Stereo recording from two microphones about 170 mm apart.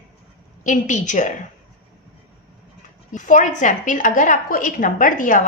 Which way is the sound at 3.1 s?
45° left (ahead or behind).